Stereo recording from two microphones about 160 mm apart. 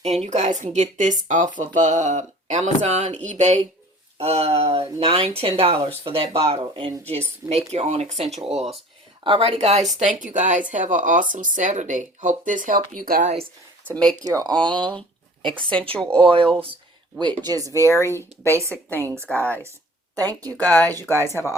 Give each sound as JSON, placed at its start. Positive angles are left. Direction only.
{"t": 0.0, "sound": "speech", "side_deg": -40}
{"t": 13.9, "sound": "speech", "side_deg": 5}
{"t": 14.3, "sound": "speech", "side_deg": -25}
{"t": 15.7, "sound": "speech", "side_deg": 10}
{"t": 16.1, "sound": "speech", "side_deg": -35}
{"t": 17.4, "sound": "speech", "side_deg": -25}
{"t": 17.8, "sound": "speech", "side_deg": 15}
{"t": 20.1, "sound": "speech", "side_deg": -25}
{"t": 20.5, "sound": "speech", "side_deg": 10}